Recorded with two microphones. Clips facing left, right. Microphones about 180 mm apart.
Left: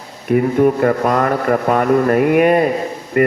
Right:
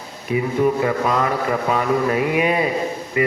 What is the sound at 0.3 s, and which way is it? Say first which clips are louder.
Speech: left 5 dB; 55° left (ahead or behind).